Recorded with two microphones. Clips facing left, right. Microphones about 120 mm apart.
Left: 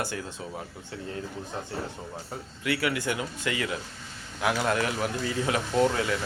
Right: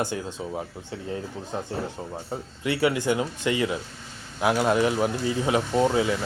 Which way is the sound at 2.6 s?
25° right (ahead or behind).